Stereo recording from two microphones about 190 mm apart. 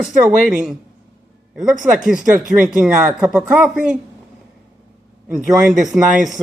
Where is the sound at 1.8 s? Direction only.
10° right (ahead or behind).